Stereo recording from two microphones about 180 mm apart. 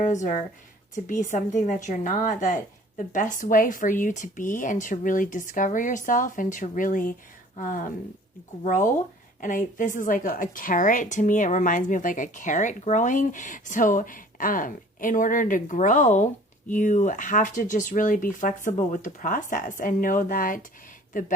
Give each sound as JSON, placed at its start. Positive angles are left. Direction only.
{"t": 0.0, "sound": "a woman's voice", "side_deg": 40}
{"t": 9.4, "sound": "a woman's voice", "side_deg": 45}